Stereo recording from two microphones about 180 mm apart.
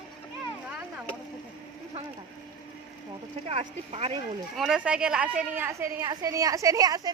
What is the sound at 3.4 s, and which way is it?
Speech, 35° right (ahead or behind).